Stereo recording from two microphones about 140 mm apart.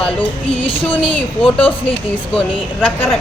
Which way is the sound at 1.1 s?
10° left (ahead or behind).